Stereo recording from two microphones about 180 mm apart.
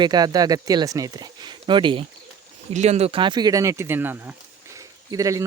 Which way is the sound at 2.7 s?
40° right (ahead or behind).